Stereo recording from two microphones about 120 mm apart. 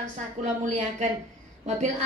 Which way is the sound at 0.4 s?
75° right (ahead or behind).